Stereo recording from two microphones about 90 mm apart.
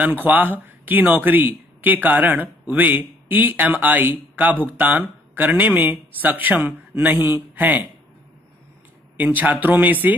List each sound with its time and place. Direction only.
0.0 s speech: 20° right (ahead or behind)
9.1 s speech: 20° right (ahead or behind)